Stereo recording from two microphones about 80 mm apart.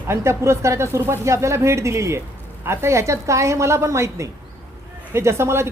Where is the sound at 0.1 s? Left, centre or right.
Right.